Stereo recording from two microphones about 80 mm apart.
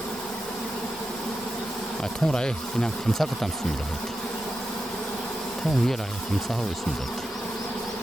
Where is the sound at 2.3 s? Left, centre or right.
Centre.